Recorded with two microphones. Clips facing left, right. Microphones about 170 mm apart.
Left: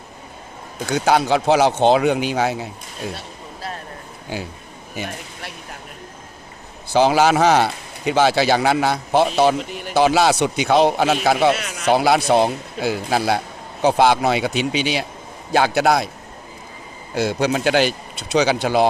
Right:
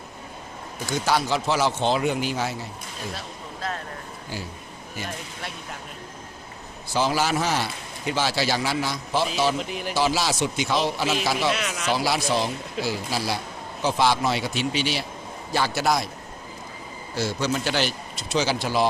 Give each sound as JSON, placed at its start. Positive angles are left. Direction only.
{"t": 0.9, "sound": "a man's voice", "side_deg": 60}
{"t": 6.9, "sound": "speech", "side_deg": 70}
{"t": 8.1, "sound": "a man's voice", "side_deg": 60}
{"t": 9.6, "sound": "speech", "side_deg": 0}
{"t": 9.9, "sound": "a man's voice", "side_deg": 60}
{"t": 14.5, "sound": "speech", "side_deg": 15}
{"t": 15.5, "sound": "a man's voice", "side_deg": 60}
{"t": 17.2, "sound": "a man's voice", "side_deg": 60}